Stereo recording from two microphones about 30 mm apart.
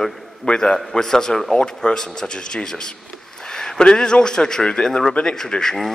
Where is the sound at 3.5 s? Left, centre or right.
Centre.